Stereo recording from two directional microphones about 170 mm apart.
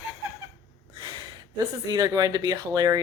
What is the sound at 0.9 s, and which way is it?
Speech, 25° right (ahead or behind).